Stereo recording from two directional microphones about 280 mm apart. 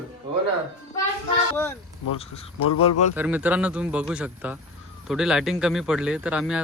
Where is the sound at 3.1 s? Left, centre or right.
Centre.